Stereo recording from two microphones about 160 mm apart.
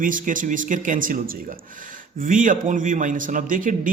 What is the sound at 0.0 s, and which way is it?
A man's voice, 60° right (ahead or behind).